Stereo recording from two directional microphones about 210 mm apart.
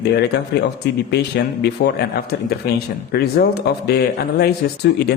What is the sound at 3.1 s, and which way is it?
Speech, 50° left (ahead or behind).